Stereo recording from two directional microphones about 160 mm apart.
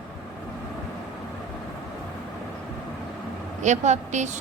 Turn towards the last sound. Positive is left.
turn(degrees=-50)  # may be behind; listen again after turning